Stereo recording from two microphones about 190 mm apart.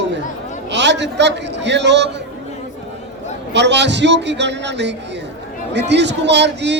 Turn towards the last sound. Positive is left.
turn(degrees=-65)  # may be behind; listen again after turning